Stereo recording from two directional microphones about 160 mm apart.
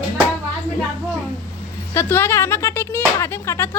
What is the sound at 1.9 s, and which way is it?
Speech, 15° left (ahead or behind).